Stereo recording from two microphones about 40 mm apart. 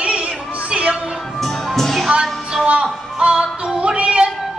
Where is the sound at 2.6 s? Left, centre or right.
Right.